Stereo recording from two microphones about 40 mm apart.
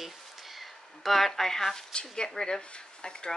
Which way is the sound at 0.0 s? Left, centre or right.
Centre.